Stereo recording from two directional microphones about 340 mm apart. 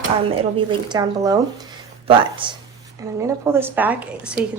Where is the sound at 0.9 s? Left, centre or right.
Centre.